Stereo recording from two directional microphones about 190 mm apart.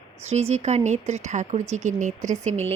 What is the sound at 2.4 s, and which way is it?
Speech, 35° right (ahead or behind).